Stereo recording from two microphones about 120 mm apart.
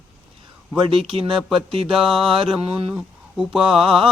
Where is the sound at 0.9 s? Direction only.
50° right (ahead or behind).